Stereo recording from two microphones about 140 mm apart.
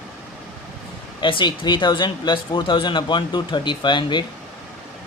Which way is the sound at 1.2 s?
35° left (ahead or behind).